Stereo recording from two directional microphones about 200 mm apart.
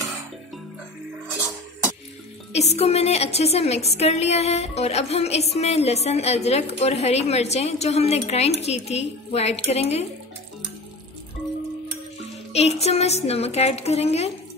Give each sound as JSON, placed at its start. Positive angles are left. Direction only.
{"t": 2.5, "sound": "a woman's voice", "side_deg": 30}
{"t": 12.5, "sound": "a woman's voice", "side_deg": 30}